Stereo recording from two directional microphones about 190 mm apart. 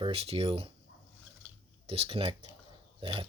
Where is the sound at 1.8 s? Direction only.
30° right (ahead or behind).